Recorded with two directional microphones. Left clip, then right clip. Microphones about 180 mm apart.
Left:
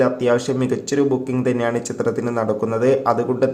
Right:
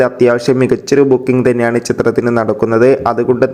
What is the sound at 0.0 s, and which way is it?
Speech, 35° right (ahead or behind).